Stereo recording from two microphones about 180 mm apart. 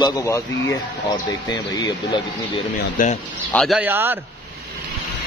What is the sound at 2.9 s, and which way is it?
Speech, 45° left (ahead or behind).